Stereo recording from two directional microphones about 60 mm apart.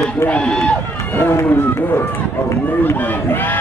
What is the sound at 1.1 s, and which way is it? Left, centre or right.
Speech, left.